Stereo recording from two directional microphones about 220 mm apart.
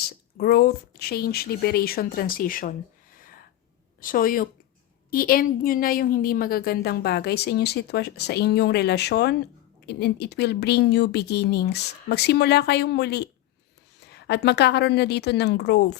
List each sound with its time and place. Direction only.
0.1 s a woman's voice: 45° left (ahead or behind)